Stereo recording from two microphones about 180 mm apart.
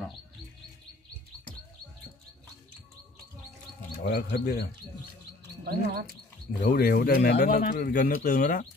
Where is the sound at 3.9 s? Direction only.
60° left (ahead or behind).